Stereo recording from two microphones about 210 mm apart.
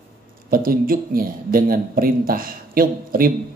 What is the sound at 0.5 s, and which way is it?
Speech, 45° right (ahead or behind).